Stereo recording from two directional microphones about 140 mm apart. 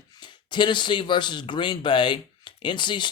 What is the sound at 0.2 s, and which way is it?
Speech, 35° left (ahead or behind).